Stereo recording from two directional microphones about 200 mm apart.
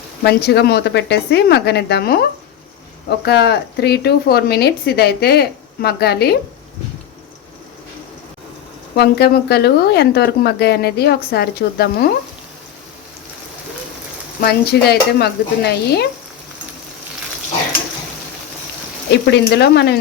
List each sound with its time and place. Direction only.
0.2 s a woman's voice: 55° left (ahead or behind)
3.2 s speech: 55° left (ahead or behind)
9.0 s speech: 55° left (ahead or behind)
14.4 s speech: 55° left (ahead or behind)
19.2 s a woman's voice: 55° left (ahead or behind)